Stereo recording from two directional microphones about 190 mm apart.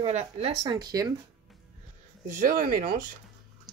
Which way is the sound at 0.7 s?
20° right (ahead or behind).